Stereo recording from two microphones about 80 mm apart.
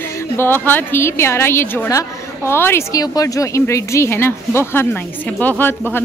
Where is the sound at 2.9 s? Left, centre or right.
Left.